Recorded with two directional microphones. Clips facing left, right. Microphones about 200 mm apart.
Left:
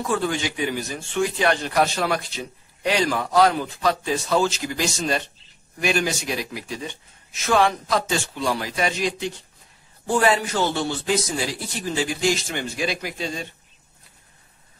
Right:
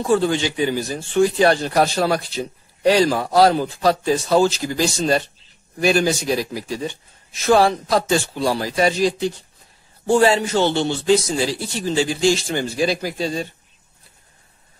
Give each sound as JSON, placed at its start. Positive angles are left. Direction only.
{"t": 0.0, "sound": "a man's voice", "side_deg": -30}